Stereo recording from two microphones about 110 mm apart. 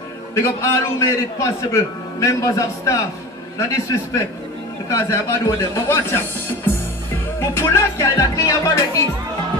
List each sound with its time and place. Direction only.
0.3 s a man's voice: 25° left (ahead or behind)